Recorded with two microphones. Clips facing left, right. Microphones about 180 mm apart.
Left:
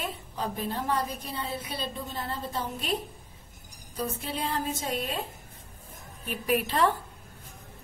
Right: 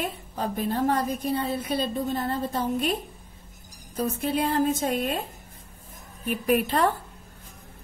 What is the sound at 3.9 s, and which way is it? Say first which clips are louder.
A woman's voice: right 7 dB; 45° right (ahead or behind).